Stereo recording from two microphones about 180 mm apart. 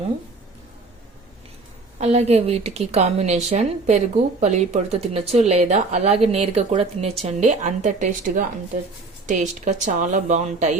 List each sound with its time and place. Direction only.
2.0 s a woman's voice: 35° right (ahead or behind)